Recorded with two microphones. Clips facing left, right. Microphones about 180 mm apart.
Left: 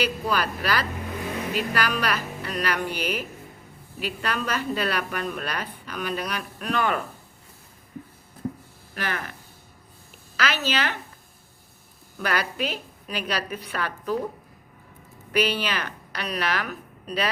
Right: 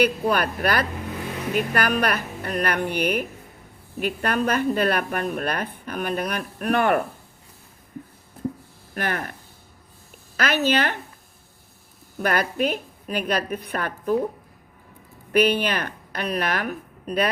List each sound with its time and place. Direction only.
0.0 s a woman's voice: 60° right (ahead or behind)
9.0 s a woman's voice: 50° right (ahead or behind)
10.3 s a woman's voice: 55° right (ahead or behind)
12.2 s a woman's voice: 50° right (ahead or behind)
15.3 s speech: 55° right (ahead or behind)